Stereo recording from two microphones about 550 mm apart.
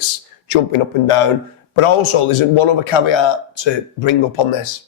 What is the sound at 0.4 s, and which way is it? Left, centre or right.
A man's voice, left.